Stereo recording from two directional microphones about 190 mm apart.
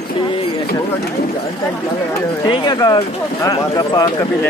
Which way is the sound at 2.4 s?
25° left (ahead or behind).